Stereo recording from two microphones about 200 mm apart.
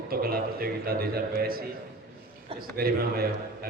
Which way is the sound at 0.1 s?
50° right (ahead or behind).